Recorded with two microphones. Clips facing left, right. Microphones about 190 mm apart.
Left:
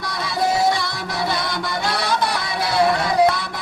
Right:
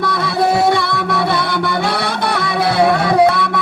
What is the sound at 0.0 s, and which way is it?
Music, 60° right (ahead or behind).